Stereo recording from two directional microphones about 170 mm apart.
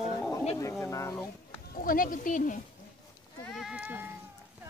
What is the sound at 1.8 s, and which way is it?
Speech, 55° left (ahead or behind).